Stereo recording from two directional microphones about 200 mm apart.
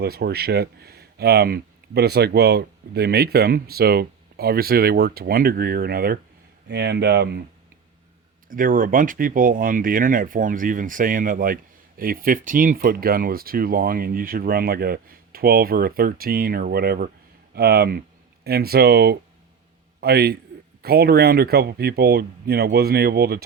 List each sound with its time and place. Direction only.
0.0 s speech: 55° right (ahead or behind)
8.4 s speech: 45° right (ahead or behind)